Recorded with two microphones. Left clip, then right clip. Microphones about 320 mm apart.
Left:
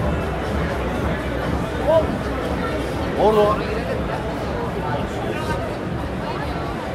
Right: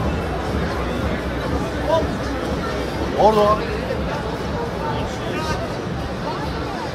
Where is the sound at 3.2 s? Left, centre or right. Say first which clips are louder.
Right 1 dB; right.